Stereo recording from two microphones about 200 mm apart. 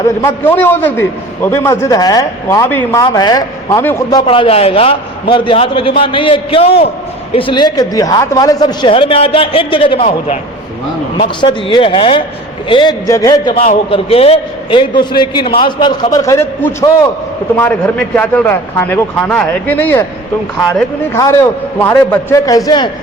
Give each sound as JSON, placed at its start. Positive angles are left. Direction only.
{"t": 0.0, "sound": "a man's voice", "side_deg": 15}
{"t": 4.3, "sound": "a man's voice", "side_deg": 30}
{"t": 11.3, "sound": "a man's voice", "side_deg": 25}
{"t": 13.7, "sound": "a man's voice", "side_deg": 30}